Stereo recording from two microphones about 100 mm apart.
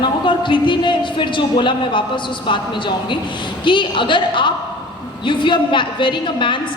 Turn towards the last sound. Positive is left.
turn(degrees=55)  # may be behind; listen again after turning